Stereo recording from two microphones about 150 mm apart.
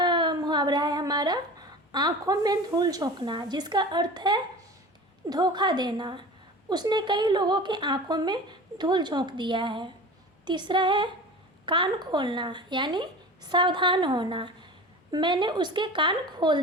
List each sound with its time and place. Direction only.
0.0 s speech: 30° right (ahead or behind)